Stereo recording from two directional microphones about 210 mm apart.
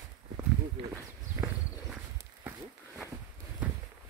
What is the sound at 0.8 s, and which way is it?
Walk, 25° right (ahead or behind).